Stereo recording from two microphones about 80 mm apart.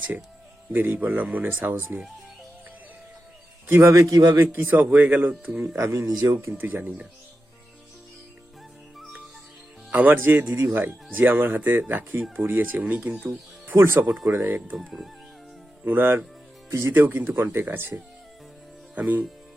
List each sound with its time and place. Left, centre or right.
0.7 s speech: right
3.7 s a man's voice: right
4.1 s speech: right
4.5 s speech: right
5.7 s a man's voice: right
6.1 s speech: right
6.5 s speech: right
9.9 s speech: right
13.7 s a man's voice: right
15.8 s speech: right